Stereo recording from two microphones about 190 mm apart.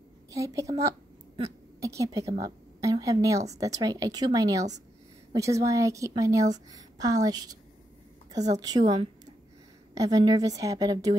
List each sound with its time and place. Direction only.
0.3 s a woman's voice: 15° right (ahead or behind)
8.5 s a woman's voice: 20° right (ahead or behind)
9.9 s a woman's voice: 20° right (ahead or behind)